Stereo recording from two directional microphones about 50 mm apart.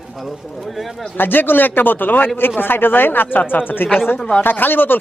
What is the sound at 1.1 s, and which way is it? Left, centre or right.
Speech, left.